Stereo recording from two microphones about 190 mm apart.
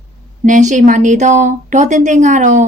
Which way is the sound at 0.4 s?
40° right (ahead or behind).